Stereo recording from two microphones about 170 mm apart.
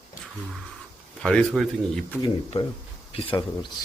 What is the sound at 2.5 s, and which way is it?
Speech, 35° left (ahead or behind).